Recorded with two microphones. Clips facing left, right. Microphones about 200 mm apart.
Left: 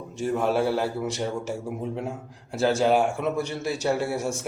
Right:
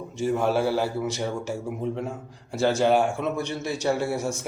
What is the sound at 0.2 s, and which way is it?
A man's voice, centre (ahead or behind).